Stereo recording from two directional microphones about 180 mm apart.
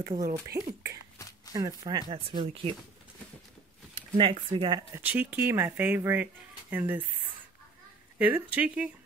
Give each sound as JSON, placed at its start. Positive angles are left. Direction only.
{"t": 0.1, "sound": "speech", "side_deg": -45}
{"t": 0.5, "sound": "speech", "side_deg": -60}
{"t": 1.1, "sound": "a sound", "side_deg": 20}
{"t": 1.5, "sound": "speech", "side_deg": -20}
{"t": 4.2, "sound": "speech", "side_deg": -30}
{"t": 5.0, "sound": "speech", "side_deg": -10}
{"t": 8.2, "sound": "speech", "side_deg": -10}